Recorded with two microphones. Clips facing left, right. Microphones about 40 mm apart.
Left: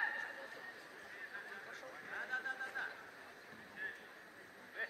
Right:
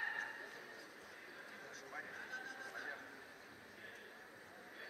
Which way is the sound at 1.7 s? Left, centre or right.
Left.